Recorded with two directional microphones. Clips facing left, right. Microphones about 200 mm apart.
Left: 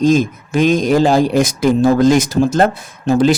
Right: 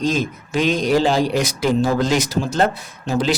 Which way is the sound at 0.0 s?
45° left (ahead or behind).